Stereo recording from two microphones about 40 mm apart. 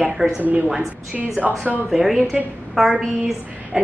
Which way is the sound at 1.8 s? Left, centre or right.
Centre.